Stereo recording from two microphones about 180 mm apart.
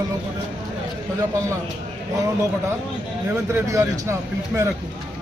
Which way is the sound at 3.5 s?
15° right (ahead or behind).